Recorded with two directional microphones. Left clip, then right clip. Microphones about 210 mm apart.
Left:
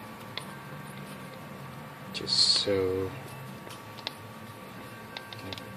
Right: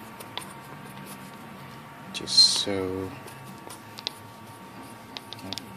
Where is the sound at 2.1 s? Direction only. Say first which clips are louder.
Right 5 dB; 35° right (ahead or behind).